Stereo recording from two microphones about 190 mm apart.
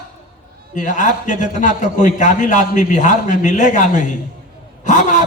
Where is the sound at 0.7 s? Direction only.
40° left (ahead or behind).